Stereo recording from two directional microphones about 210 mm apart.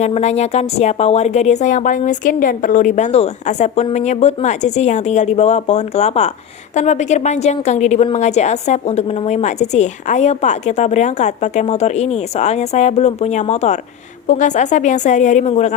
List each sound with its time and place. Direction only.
0.0 s a woman's voice: 30° left (ahead or behind)